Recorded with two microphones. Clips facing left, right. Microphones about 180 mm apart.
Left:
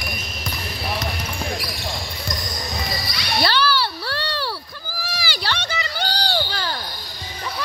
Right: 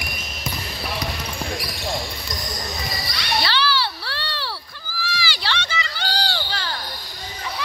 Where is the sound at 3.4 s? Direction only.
45° left (ahead or behind).